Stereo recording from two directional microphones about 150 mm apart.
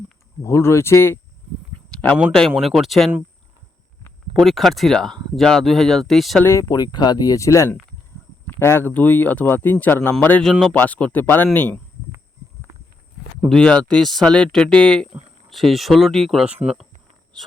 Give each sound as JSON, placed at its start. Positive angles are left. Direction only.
{"t": 0.4, "sound": "speech", "side_deg": 20}
{"t": 1.9, "sound": "a sound", "side_deg": 10}
{"t": 2.6, "sound": "speech", "side_deg": 0}
{"t": 4.4, "sound": "speech", "side_deg": 0}
{"t": 6.4, "sound": "speech", "side_deg": 20}
{"t": 13.5, "sound": "speech", "side_deg": 5}